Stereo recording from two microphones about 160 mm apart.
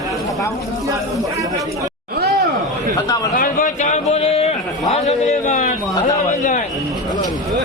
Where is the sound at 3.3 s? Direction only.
60° left (ahead or behind).